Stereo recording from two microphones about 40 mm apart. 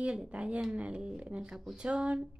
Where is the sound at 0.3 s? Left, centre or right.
Right.